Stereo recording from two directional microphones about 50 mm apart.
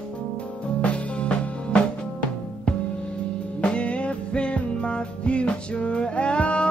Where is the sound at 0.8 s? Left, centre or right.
Left.